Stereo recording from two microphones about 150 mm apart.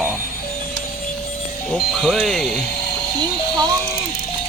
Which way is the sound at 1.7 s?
Centre (ahead or behind).